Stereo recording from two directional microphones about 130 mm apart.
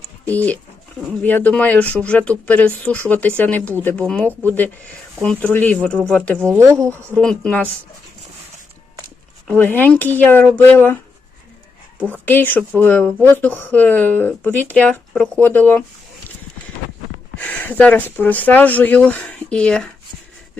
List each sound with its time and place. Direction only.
0.3 s speech: 10° left (ahead or behind)
6.5 s speech: 25° right (ahead or behind)
7.1 s speech: 5° left (ahead or behind)
9.5 s speech: 15° left (ahead or behind)
12.0 s speech: 15° left (ahead or behind)
17.3 s speech: 10° left (ahead or behind)